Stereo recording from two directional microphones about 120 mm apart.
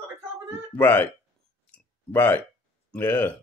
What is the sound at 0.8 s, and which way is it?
Speech, 15° left (ahead or behind).